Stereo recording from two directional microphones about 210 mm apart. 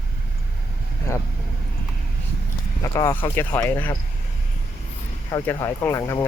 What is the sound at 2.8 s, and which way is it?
Speech, 15° left (ahead or behind).